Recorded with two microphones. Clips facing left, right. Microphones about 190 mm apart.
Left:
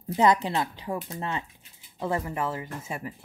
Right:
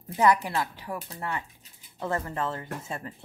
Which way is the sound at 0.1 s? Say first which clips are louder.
Left 1 dB; 20° left (ahead or behind).